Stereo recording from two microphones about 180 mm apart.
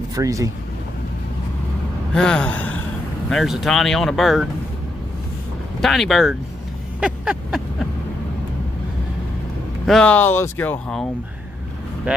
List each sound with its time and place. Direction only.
0.1 s speech: 20° right (ahead or behind)
2.1 s speech: 5° left (ahead or behind)
5.8 s speech: centre (ahead or behind)
7.0 s a sound: 5° right (ahead or behind)
9.8 s speech: 5° left (ahead or behind)